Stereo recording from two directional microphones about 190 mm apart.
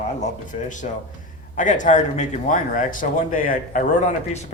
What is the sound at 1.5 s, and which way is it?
Speech, 40° left (ahead or behind).